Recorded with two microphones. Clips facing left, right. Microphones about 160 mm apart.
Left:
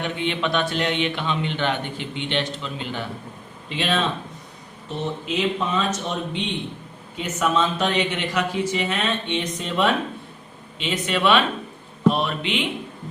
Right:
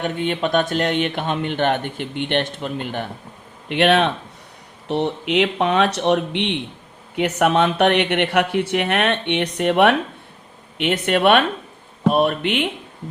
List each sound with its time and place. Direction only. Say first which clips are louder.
0.0 s speech: right 3 dB; 45° right (ahead or behind)
3.7 s speech: right 7 dB; 65° right (ahead or behind)